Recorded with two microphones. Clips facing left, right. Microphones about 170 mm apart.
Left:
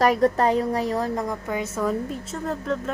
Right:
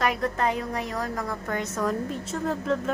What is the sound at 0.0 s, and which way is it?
A woman's voice, 35° left (ahead or behind).